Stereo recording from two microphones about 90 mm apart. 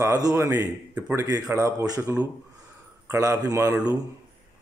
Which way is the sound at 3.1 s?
40° right (ahead or behind).